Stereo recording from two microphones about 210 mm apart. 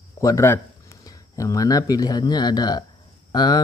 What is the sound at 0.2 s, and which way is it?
Speech, 15° left (ahead or behind).